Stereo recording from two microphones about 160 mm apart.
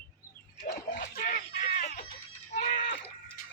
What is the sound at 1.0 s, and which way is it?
Fowl, 70° left (ahead or behind).